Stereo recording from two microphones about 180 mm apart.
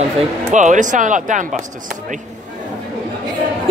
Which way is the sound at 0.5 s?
40° right (ahead or behind).